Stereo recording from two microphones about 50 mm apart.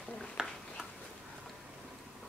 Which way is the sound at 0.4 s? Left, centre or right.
Centre.